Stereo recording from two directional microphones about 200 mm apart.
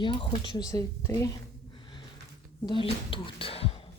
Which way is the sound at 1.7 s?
25° left (ahead or behind).